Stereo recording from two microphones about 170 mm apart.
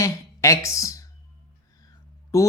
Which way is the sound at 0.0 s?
15° left (ahead or behind).